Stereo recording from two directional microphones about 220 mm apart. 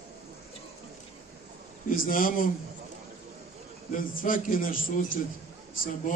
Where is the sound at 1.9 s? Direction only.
40° left (ahead or behind).